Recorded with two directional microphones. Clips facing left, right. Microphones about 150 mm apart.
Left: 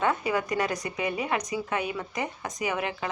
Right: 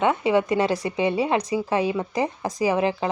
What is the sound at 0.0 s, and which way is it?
A woman's voice, 20° right (ahead or behind).